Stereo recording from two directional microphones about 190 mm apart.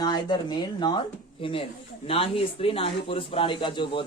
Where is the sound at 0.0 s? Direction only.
25° left (ahead or behind).